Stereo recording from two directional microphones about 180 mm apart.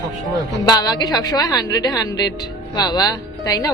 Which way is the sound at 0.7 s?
20° left (ahead or behind).